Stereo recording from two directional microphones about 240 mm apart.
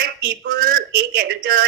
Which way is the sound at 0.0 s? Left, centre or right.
Right.